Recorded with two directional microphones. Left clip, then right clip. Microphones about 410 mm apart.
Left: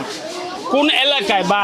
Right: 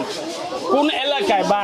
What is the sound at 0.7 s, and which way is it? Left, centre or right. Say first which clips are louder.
Speech: left 4 dB; left.